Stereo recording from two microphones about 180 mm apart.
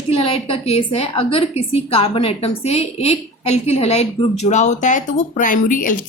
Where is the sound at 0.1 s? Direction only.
35° left (ahead or behind).